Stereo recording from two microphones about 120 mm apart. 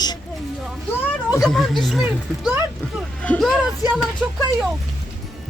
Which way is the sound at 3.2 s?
5° left (ahead or behind).